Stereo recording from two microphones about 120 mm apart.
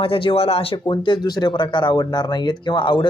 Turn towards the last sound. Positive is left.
turn(degrees=40)  # may be behind; listen again after turning